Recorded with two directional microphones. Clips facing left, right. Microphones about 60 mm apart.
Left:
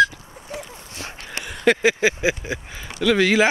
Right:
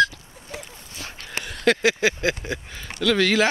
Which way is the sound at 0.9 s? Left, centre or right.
Left.